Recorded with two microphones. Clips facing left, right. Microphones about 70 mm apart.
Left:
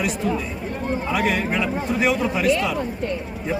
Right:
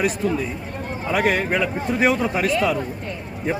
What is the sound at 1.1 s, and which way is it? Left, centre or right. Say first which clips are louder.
Speech: right 4 dB; right.